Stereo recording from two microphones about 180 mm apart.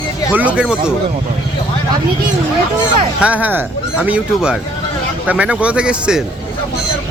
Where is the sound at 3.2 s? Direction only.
10° right (ahead or behind).